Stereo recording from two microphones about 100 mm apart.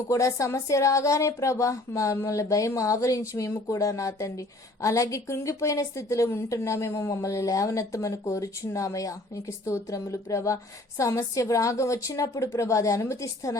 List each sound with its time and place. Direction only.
0.1 s speech: 30° left (ahead or behind)